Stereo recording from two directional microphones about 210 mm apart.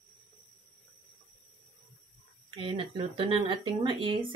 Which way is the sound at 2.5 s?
25° right (ahead or behind).